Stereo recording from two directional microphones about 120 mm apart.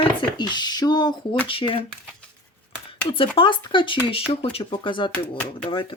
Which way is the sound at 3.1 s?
50° left (ahead or behind).